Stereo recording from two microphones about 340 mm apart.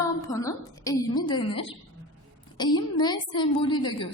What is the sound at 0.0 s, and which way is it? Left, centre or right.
A woman's voice, centre.